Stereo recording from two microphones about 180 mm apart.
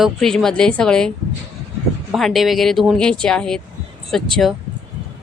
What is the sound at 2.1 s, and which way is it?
Speech, centre (ahead or behind).